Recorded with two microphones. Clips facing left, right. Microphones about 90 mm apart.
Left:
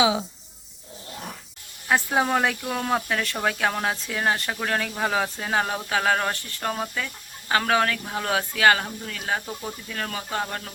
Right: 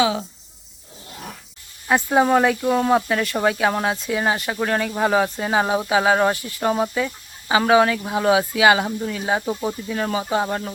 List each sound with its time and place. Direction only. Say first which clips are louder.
0.0 s speech: right 1 dB; 10° left (ahead or behind)
1.9 s speech: right 5 dB; centre (ahead or behind)